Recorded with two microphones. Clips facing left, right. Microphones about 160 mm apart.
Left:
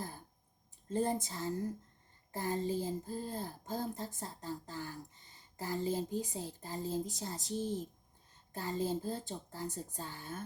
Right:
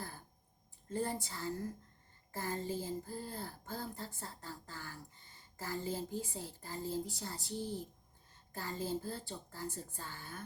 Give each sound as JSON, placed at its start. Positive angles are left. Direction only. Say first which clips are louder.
{"t": 0.9, "sound": "speech", "louder": "left 4 dB", "side_deg": 20}